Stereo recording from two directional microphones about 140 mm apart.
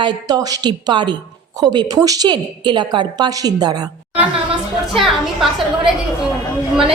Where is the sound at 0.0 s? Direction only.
30° right (ahead or behind).